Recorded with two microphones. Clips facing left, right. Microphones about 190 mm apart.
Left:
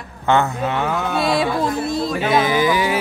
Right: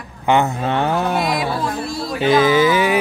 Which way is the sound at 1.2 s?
25° left (ahead or behind).